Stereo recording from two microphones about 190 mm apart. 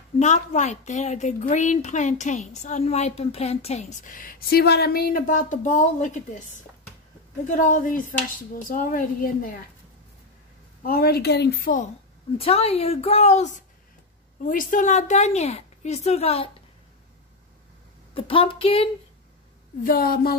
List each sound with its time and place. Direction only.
0.2 s a woman's voice: 40° left (ahead or behind)
7.4 s a woman's voice: 40° left (ahead or behind)
10.8 s a woman's voice: 50° left (ahead or behind)
12.4 s a woman's voice: 30° left (ahead or behind)
18.1 s speech: 30° left (ahead or behind)
19.8 s a woman's voice: 50° left (ahead or behind)